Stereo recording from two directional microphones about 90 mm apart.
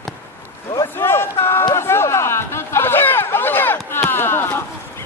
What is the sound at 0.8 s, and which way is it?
Speech, 25° left (ahead or behind).